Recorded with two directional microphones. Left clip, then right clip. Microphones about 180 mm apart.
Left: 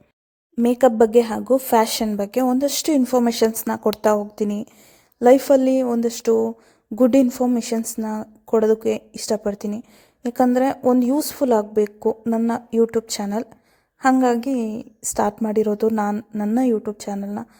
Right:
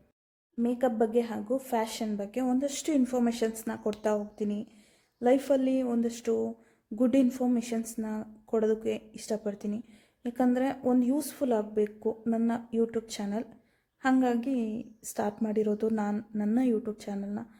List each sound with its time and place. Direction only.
0.6 s a woman's voice: 45° left (ahead or behind); by 17.4 s 25° left (ahead or behind)